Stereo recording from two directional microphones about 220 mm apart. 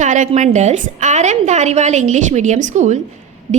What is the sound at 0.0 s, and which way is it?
A woman's voice, 35° right (ahead or behind).